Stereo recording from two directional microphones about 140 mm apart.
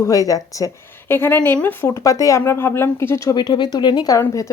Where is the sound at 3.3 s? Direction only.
35° left (ahead or behind).